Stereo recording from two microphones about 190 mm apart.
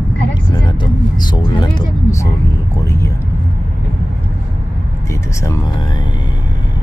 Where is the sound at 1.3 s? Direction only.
25° left (ahead or behind).